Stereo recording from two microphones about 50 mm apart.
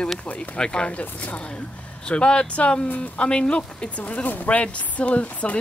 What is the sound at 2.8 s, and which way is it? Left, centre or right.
Speech, left.